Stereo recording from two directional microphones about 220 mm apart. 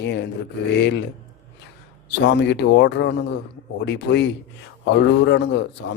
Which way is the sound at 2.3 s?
50° left (ahead or behind).